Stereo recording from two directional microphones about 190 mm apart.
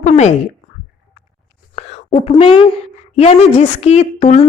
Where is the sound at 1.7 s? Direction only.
35° left (ahead or behind).